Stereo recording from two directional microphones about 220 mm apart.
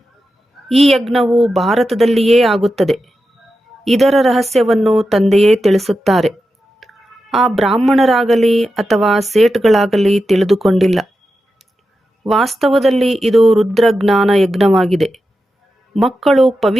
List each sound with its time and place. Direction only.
0.7 s a woman's voice: centre (ahead or behind)
12.2 s a woman's voice: centre (ahead or behind)